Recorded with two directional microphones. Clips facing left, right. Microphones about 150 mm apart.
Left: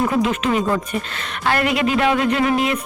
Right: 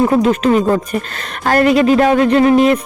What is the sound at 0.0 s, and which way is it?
Speech, 40° right (ahead or behind).